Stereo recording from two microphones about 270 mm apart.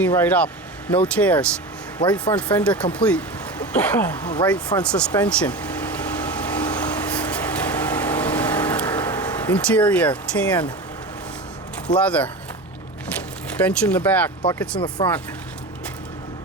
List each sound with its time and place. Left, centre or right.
0.0 s speech: centre
6.4 s vehicle: centre
11.9 s speech: centre
13.5 s speech: centre
14.8 s speech: centre